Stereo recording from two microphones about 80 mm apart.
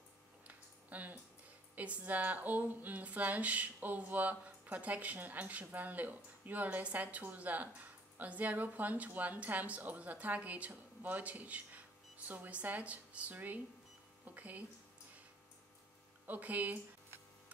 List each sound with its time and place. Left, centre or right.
0.5 s a sound: right
1.8 s speech: centre
16.3 s speech: centre